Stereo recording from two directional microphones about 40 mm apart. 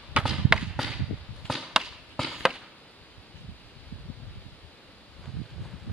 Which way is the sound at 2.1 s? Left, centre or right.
Centre.